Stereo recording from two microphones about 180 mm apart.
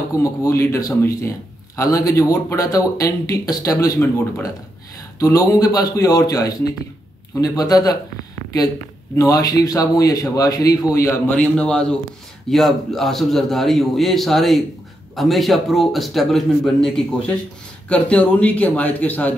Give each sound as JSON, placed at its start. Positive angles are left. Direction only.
{"t": 0.1, "sound": "a man's voice", "side_deg": 15}
{"t": 9.1, "sound": "a man's voice", "side_deg": 20}